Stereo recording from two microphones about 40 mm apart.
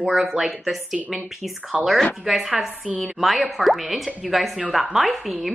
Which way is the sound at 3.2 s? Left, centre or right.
Centre.